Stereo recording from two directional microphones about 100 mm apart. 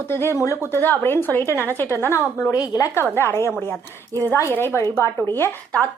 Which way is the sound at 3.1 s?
25° left (ahead or behind).